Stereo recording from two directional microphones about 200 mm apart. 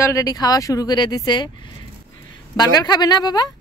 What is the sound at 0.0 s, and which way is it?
A woman's voice, 15° left (ahead or behind).